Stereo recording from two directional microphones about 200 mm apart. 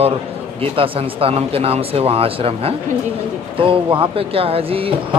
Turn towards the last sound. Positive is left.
turn(degrees=-30)  # may be behind; listen again after turning